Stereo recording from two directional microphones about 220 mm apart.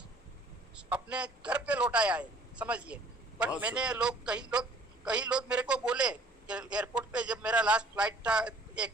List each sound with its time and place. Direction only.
0.7 s a man's voice: 5° right (ahead or behind)